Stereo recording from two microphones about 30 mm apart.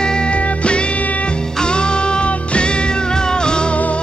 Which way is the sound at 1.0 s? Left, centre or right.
Left.